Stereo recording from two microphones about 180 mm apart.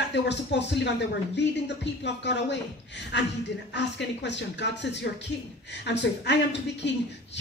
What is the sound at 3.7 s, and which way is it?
Speech, 75° left (ahead or behind).